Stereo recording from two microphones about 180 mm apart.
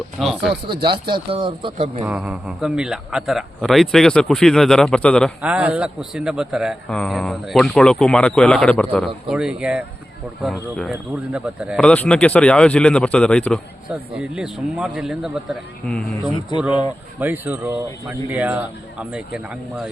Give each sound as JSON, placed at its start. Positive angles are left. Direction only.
{"t": 0.2, "sound": "a man's voice", "side_deg": 0}
{"t": 0.9, "sound": "speech", "side_deg": -25}
{"t": 2.0, "sound": "a man's voice", "side_deg": -5}
{"t": 5.4, "sound": "a man's voice", "side_deg": -5}
{"t": 11.8, "sound": "a man's voice", "side_deg": 5}
{"t": 17.2, "sound": "a man's voice", "side_deg": -10}